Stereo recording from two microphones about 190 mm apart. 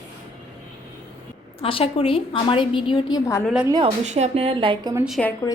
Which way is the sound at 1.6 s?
30° left (ahead or behind).